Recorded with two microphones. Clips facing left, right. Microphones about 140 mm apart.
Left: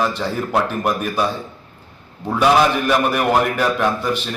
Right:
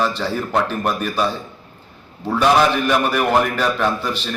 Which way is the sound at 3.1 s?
10° left (ahead or behind).